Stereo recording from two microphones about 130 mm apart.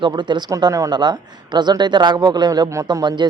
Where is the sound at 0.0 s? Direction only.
35° right (ahead or behind).